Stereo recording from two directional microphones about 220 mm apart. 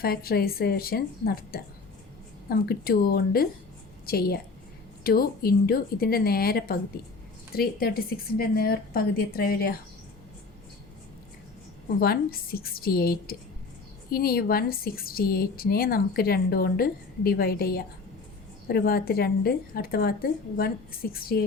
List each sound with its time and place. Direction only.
0.0 s a woman's voice: 45° left (ahead or behind)
11.9 s a woman's voice: 45° left (ahead or behind)